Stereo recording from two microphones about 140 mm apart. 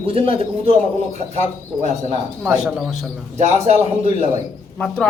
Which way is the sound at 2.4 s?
5° right (ahead or behind).